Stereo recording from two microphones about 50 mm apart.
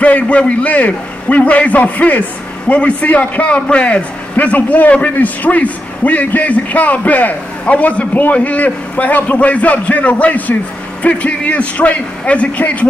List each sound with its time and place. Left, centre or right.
0.0 s a man's voice: left